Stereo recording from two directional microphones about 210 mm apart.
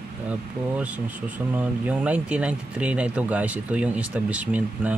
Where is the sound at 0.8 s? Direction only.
5° right (ahead or behind).